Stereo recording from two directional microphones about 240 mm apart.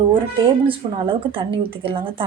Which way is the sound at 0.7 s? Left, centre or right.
Right.